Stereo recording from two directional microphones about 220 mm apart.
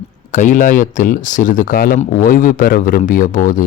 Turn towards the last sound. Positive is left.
turn(degrees=40)  # may be behind; listen again after turning